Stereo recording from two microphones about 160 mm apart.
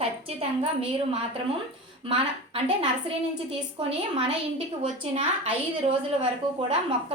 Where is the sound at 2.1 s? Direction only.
35° right (ahead or behind).